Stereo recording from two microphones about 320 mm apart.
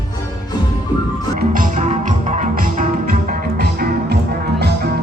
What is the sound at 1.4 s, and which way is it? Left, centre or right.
Music, right.